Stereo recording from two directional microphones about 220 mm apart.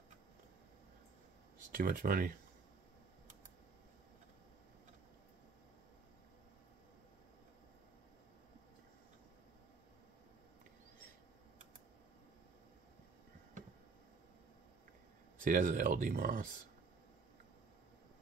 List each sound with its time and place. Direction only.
1.7 s speech: 40° right (ahead or behind)
15.4 s speech: 35° right (ahead or behind)